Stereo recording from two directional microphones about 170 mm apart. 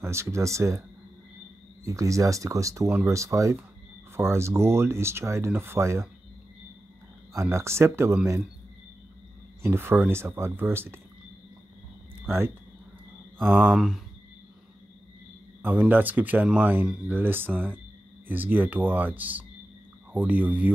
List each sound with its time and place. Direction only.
0.0 s speech: 15° right (ahead or behind)
1.9 s speech: 20° right (ahead or behind)
7.3 s speech: 15° right (ahead or behind)
9.6 s speech: 15° right (ahead or behind)
12.2 s speech: 15° right (ahead or behind)
13.6 s speech: 5° right (ahead or behind)
15.6 s speech: 10° right (ahead or behind)